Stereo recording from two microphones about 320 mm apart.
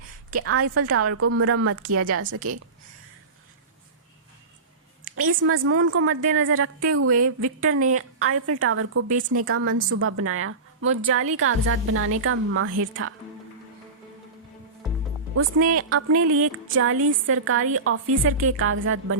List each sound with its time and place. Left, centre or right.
0.3 s a woman's voice: right
5.1 s a woman's voice: right
15.4 s a woman's voice: right